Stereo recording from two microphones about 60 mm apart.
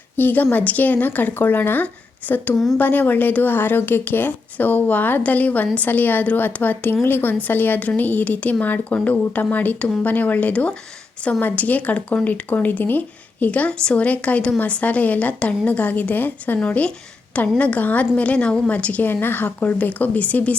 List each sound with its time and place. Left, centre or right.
0.2 s speech: left